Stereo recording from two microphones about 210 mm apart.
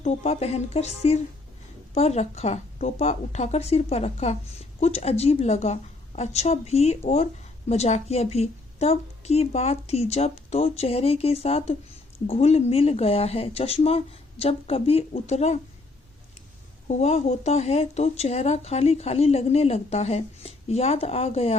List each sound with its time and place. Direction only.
0.0 s a woman's voice: 30° left (ahead or behind)
16.9 s speech: 30° left (ahead or behind)